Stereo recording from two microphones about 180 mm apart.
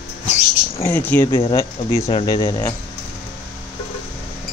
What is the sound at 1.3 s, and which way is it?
Speech, 30° left (ahead or behind).